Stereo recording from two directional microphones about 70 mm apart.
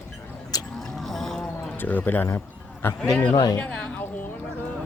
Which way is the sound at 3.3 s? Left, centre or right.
Left.